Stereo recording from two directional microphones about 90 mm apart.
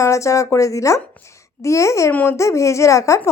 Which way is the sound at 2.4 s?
35° left (ahead or behind).